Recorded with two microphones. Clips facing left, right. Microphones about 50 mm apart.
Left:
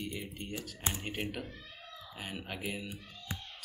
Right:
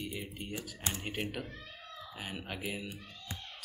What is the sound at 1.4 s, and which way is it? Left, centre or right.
Cat, right.